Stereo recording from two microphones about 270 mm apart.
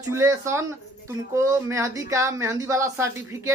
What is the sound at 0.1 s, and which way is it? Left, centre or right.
Speech, centre.